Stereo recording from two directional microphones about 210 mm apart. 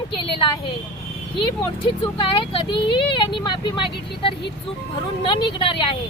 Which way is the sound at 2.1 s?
25° left (ahead or behind).